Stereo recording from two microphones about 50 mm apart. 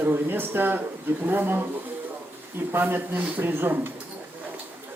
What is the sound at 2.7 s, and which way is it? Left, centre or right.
Speech, right.